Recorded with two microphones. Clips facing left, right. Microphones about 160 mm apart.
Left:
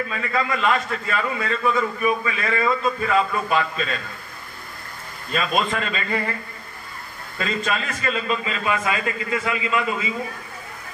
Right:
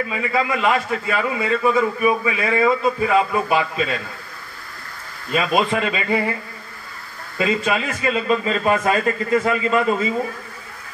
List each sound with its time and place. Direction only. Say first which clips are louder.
0.1 s a man's voice: right 3 dB; 10° right (ahead or behind)
5.3 s a man's voice: right 4 dB; 15° right (ahead or behind)
7.3 s a man's voice: right 5 dB; 15° right (ahead or behind)
8.5 s a man's voice: right 6 dB; 40° right (ahead or behind)